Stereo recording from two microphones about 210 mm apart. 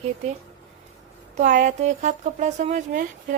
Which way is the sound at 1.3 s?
35° right (ahead or behind).